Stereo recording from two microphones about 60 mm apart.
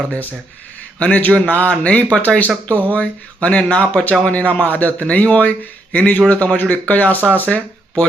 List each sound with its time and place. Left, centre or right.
0.1 s speech: left